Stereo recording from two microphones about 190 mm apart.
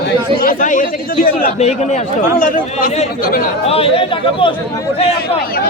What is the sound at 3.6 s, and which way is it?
Speech, 30° left (ahead or behind).